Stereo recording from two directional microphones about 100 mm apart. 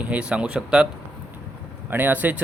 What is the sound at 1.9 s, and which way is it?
Speech, 15° right (ahead or behind).